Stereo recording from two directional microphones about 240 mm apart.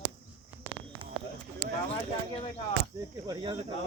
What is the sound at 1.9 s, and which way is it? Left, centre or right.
Speech, left.